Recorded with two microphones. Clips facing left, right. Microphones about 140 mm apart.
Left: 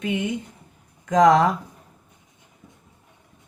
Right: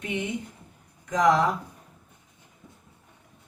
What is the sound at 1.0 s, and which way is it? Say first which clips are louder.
Speech: left 6 dB; 90° left.